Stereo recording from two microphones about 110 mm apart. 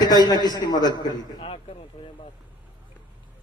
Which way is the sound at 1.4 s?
60° left (ahead or behind).